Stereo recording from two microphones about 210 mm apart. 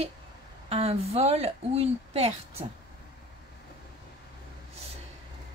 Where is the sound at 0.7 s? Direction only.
30° right (ahead or behind).